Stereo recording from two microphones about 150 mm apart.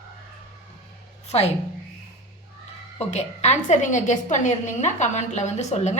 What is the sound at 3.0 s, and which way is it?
A woman's voice, 50° left (ahead or behind).